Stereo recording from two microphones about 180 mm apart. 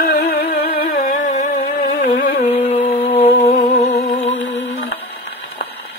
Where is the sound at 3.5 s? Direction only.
55° left (ahead or behind).